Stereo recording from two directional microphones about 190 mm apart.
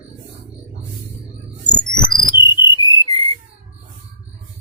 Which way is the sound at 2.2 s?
25° left (ahead or behind).